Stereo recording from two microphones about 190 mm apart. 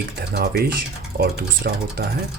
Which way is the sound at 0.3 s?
55° right (ahead or behind).